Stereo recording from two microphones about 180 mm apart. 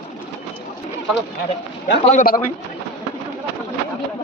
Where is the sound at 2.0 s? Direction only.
45° left (ahead or behind).